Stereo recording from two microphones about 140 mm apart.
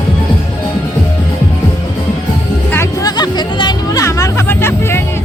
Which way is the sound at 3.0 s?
30° left (ahead or behind).